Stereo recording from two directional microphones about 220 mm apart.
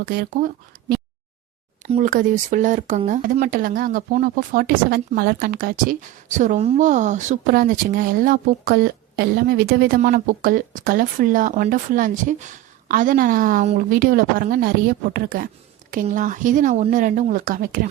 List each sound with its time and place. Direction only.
0.0 s speech: 40° right (ahead or behind)